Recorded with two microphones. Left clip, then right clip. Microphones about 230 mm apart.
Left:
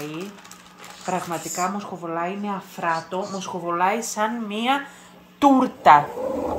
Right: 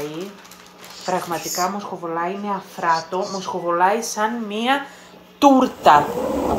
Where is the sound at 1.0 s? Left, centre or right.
Left.